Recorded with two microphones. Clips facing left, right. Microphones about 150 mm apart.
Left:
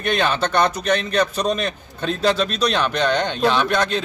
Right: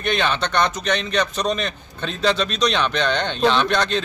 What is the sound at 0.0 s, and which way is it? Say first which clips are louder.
Speech: left 2 dB; 5° left (ahead or behind).